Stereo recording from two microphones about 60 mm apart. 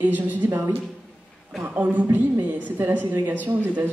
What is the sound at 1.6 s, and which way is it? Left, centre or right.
A woman's voice, right.